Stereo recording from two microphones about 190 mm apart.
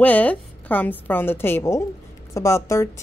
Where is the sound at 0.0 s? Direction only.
10° left (ahead or behind).